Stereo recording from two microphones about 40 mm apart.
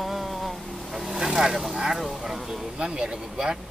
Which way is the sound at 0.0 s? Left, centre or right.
Centre.